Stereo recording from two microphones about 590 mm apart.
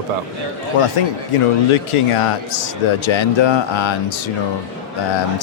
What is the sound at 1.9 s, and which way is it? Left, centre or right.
A man's voice, left.